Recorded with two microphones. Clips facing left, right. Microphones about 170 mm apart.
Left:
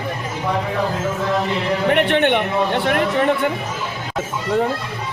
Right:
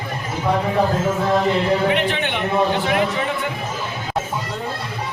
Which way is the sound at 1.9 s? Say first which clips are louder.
Left 5 dB; 65° left (ahead or behind).